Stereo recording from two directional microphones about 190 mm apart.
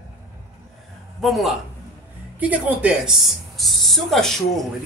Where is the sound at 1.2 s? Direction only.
Centre (ahead or behind).